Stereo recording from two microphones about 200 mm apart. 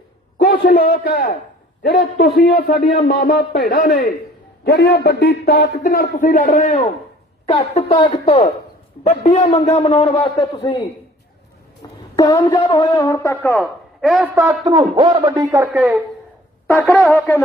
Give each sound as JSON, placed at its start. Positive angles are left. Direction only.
{"t": 0.4, "sound": "a man's voice", "side_deg": 50}
{"t": 2.4, "sound": "a man's voice", "side_deg": 50}
{"t": 7.4, "sound": "a woman's voice", "side_deg": 30}
{"t": 12.1, "sound": "speech", "side_deg": 20}
{"t": 14.0, "sound": "a man's voice", "side_deg": 0}
{"t": 14.6, "sound": "speech", "side_deg": -20}
{"t": 16.6, "sound": "speech", "side_deg": 10}